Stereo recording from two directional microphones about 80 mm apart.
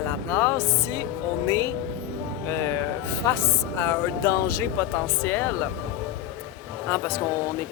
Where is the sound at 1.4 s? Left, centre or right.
Left.